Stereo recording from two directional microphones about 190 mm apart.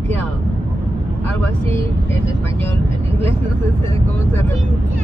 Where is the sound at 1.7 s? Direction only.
10° left (ahead or behind).